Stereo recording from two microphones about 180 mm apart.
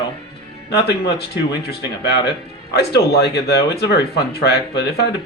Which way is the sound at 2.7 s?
65° left (ahead or behind).